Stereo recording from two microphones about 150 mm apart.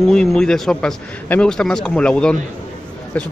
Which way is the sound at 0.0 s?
5° left (ahead or behind).